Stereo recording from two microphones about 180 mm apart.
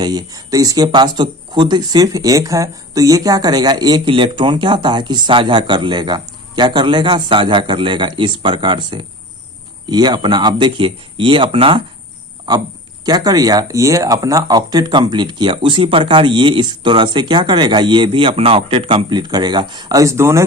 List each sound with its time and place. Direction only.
0.0 s speech: 20° right (ahead or behind)